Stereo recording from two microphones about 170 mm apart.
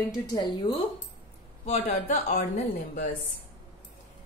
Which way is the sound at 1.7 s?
45° left (ahead or behind).